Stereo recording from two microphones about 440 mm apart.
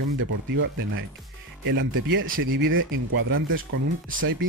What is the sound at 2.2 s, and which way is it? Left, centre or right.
Speech, right.